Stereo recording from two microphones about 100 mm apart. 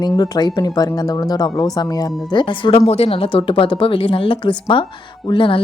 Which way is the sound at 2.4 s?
55° left (ahead or behind).